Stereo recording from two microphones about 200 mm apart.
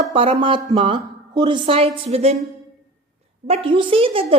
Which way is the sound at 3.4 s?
30° right (ahead or behind).